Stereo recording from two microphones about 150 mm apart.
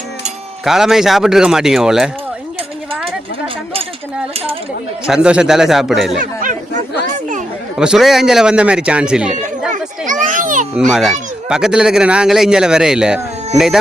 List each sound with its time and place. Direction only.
0.6 s speech: 5° right (ahead or behind)
5.0 s speech: 5° right (ahead or behind)
6.1 s a sound: 60° right (ahead or behind)
7.8 s speech: 5° right (ahead or behind)
10.1 s children playing: 60° right (ahead or behind)
10.8 s speech: centre (ahead or behind)